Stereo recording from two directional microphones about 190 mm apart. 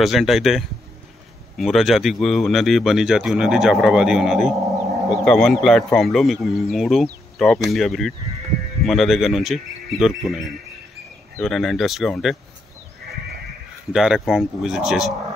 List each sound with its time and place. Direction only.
0.0 s speech: centre (ahead or behind)
13.9 s speech: centre (ahead or behind)